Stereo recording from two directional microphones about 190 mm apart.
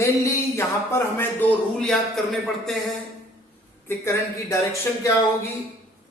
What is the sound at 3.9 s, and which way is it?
Speech, 15° left (ahead or behind).